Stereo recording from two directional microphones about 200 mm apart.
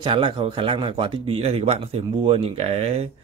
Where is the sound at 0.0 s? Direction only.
25° right (ahead or behind).